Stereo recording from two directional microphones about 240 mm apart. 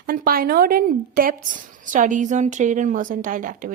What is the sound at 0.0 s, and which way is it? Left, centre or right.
A woman's voice, right.